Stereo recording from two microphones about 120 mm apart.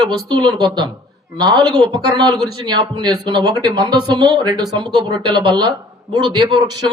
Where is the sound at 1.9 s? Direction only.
35° right (ahead or behind).